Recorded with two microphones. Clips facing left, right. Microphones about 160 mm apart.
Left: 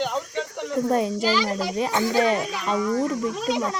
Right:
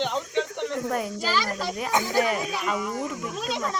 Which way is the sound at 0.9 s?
25° left (ahead or behind).